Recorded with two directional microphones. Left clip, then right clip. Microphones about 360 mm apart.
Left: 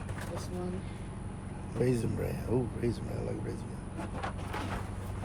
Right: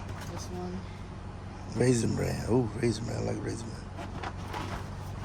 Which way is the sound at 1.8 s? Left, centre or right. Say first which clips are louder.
Right 4 dB; centre.